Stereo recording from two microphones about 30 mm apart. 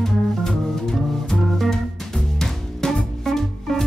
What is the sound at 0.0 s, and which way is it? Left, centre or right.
Music, centre.